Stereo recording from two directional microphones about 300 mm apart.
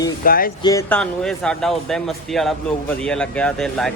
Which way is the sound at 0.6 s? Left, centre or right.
Centre.